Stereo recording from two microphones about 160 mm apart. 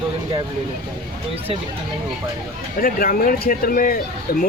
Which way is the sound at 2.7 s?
65° left (ahead or behind).